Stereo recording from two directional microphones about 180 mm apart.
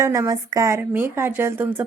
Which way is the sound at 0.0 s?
15° right (ahead or behind).